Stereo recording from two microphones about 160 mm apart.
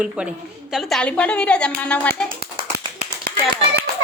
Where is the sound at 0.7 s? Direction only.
5° left (ahead or behind).